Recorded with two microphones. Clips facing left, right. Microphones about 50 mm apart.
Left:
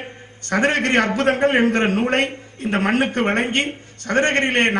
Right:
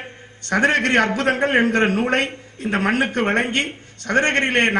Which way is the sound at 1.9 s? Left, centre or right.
Left.